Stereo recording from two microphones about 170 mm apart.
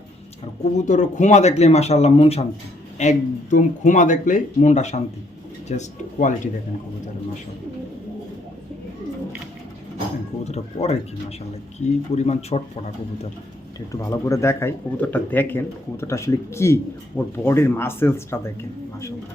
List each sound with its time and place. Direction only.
0.6 s speech: 45° left (ahead or behind)
10.4 s speech: 40° left (ahead or behind)
13.7 s speech: 20° left (ahead or behind)